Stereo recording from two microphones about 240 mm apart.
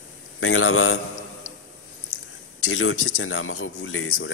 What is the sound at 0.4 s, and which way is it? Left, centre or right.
Speech, left.